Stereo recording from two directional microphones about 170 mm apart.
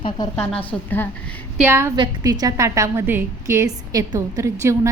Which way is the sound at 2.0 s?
20° right (ahead or behind).